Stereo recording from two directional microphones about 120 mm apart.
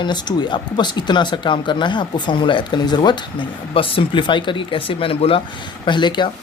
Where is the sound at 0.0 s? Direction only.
35° left (ahead or behind).